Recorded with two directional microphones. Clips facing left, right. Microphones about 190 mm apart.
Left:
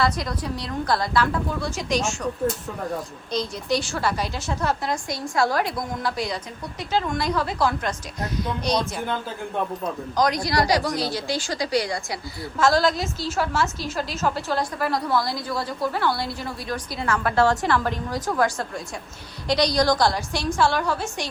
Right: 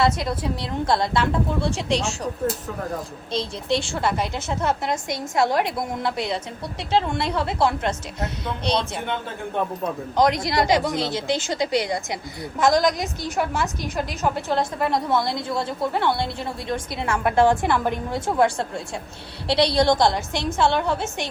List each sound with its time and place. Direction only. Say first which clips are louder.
0.0 s a woman's voice: right 3 dB; 25° right (ahead or behind)
3.3 s a woman's voice: even; 25° right (ahead or behind)
10.2 s a woman's voice: right 2 dB; 25° right (ahead or behind)